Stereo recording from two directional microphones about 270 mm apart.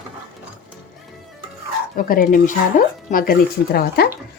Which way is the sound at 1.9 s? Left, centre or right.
Left.